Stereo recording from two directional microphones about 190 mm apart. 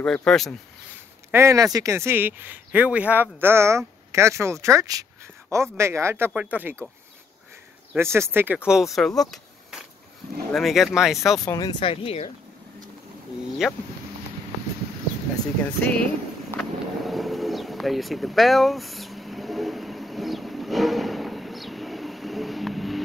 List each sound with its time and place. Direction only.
0.0 s speech: 5° left (ahead or behind)
1.3 s speech: 15° right (ahead or behind)
7.9 s speech: 15° right (ahead or behind)
11.4 s speech: 20° left (ahead or behind)
13.6 s speech: 5° right (ahead or behind)
15.6 s speech: 10° left (ahead or behind)
16.5 s vehicle: centre (ahead or behind)